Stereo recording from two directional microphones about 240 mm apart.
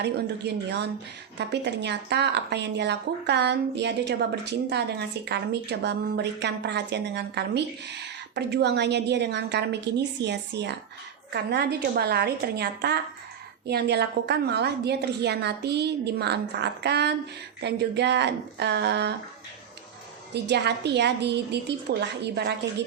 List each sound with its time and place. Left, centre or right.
0.0 s a woman's voice: right
20.3 s a woman's voice: right